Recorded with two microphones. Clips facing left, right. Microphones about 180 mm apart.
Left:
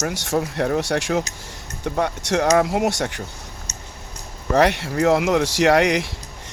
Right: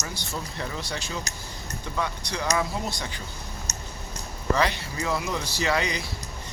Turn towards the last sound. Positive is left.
turn(degrees=85)